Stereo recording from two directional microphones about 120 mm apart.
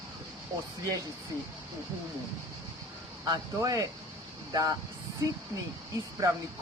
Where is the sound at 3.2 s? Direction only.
30° right (ahead or behind).